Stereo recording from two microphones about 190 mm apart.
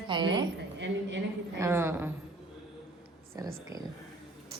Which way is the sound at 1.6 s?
15° right (ahead or behind).